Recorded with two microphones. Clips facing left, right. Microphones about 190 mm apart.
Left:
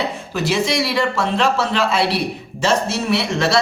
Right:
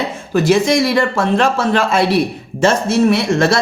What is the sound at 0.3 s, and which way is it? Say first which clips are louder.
Speech: right 7 dB; 50° right (ahead or behind).